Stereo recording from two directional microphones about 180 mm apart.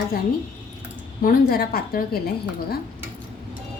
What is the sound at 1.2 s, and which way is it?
Speech, 55° left (ahead or behind).